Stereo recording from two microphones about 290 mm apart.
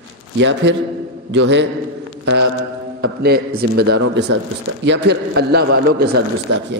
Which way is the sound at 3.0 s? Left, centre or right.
Right.